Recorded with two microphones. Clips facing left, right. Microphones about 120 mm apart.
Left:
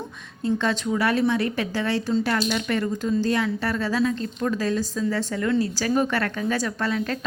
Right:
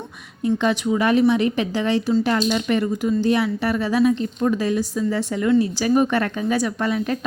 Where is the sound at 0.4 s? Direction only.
15° right (ahead or behind).